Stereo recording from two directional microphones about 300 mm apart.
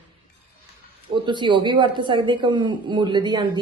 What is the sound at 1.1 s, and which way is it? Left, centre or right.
Speech, centre.